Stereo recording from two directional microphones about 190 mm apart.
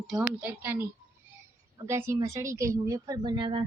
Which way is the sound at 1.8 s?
15° right (ahead or behind).